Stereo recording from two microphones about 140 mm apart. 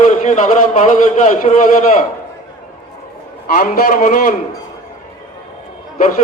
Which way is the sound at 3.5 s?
90° left.